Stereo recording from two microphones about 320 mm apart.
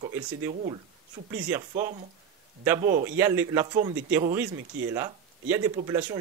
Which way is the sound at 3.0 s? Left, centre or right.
Centre.